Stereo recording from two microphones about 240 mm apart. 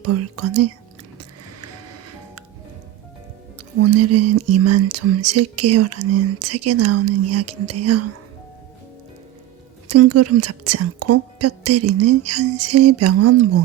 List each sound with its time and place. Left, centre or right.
0.0 s speech: right
1.6 s music: right
3.8 s speech: right
9.9 s speech: right